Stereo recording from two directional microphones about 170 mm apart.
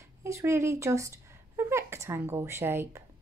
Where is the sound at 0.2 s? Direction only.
15° right (ahead or behind).